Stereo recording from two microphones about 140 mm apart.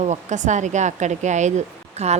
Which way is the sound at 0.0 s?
55° right (ahead or behind).